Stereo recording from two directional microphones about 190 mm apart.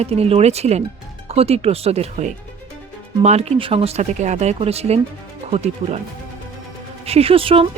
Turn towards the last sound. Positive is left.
turn(degrees=-30)  # may be behind; listen again after turning